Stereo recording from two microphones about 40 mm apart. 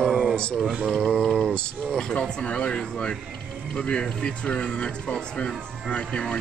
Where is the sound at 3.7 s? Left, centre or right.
Left.